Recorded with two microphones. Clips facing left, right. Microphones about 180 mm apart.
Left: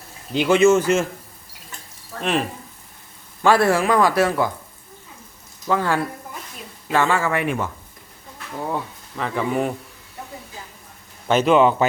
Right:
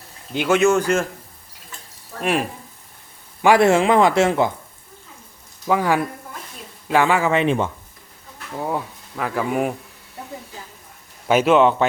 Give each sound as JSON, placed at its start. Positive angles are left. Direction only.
{"t": 0.3, "sound": "a man's voice", "side_deg": 0}
{"t": 3.4, "sound": "speech", "side_deg": -20}
{"t": 5.6, "sound": "speech", "side_deg": -15}
{"t": 8.7, "sound": "speech", "side_deg": -5}
{"t": 11.3, "sound": "a man's voice", "side_deg": -5}